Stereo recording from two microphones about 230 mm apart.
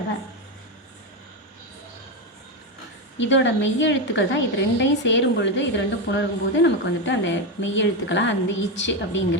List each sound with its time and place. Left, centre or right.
3.2 s a woman's voice: left